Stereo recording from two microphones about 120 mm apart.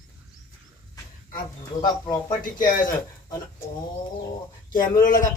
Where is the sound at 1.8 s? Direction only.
35° left (ahead or behind).